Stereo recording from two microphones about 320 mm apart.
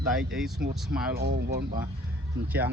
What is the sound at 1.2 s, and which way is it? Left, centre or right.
Speech, right.